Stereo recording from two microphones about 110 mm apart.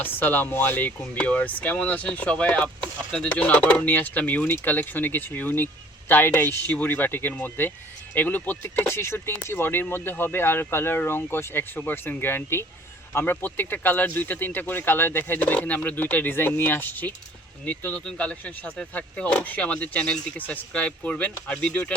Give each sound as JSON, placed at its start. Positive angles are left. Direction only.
{"t": 0.0, "sound": "speech", "side_deg": 15}